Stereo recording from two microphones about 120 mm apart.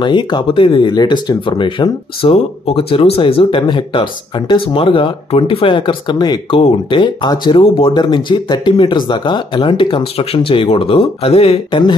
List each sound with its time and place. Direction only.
0.0 s speech: 40° left (ahead or behind)
6.6 s speech: 50° left (ahead or behind)